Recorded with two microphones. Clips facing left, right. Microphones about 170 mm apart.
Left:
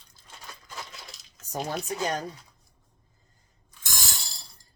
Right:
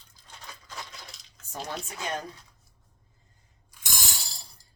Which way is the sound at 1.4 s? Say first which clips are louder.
Left 5 dB; 40° left (ahead or behind).